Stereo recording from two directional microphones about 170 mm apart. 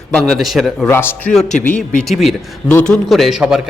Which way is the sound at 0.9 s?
15° left (ahead or behind).